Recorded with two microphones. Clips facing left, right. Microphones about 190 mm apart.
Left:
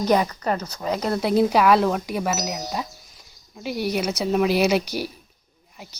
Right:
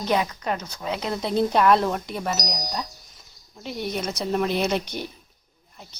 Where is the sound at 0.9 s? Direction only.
40° left (ahead or behind).